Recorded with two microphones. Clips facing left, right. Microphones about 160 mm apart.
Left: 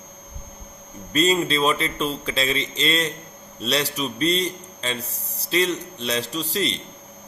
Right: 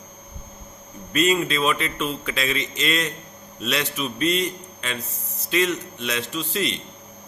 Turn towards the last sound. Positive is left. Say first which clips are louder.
# left 1 dB
turn(degrees=35)  # may be behind; listen again after turning